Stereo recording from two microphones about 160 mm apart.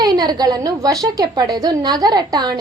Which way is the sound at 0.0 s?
25° right (ahead or behind).